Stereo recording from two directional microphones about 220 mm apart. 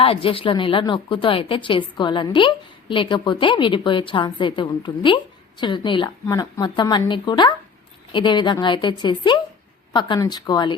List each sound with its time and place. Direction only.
0.0 s a woman's voice: 25° left (ahead or behind)